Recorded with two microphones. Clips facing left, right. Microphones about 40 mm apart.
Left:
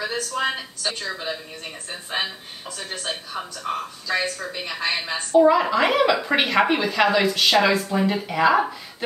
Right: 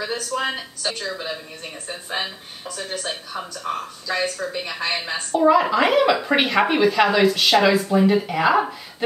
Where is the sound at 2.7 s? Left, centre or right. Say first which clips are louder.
Right 3 dB; centre.